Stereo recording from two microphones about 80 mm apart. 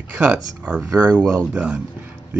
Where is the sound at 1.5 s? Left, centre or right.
Centre.